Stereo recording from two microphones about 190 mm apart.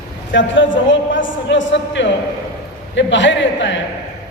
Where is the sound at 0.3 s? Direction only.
75° left (ahead or behind).